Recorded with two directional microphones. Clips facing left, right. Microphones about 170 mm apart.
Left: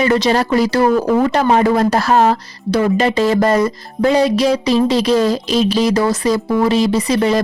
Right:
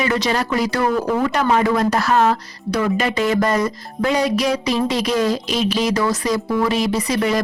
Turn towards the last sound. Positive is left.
turn(degrees=30)  # may be behind; listen again after turning